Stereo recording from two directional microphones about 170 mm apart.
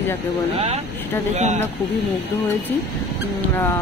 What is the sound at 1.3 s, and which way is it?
Speech, 45° right (ahead or behind).